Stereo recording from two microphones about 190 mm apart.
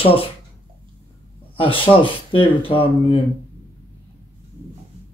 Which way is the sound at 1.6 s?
30° left (ahead or behind).